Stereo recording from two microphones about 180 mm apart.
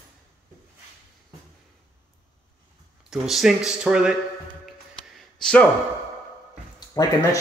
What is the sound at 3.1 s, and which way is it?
A man's voice, centre (ahead or behind).